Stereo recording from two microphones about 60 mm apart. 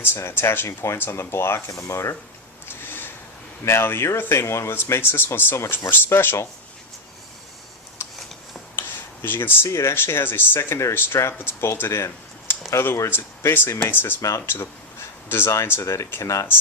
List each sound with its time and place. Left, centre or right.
0.0 s speech: left
2.6 s a sound: left
3.6 s speech: left
9.2 s speech: left
9.6 s speech: left
14.2 s speech: left
14.4 s speech: left